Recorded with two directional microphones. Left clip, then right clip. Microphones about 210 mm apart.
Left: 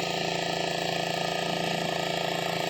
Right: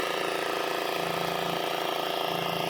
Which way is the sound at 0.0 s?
25° left (ahead or behind).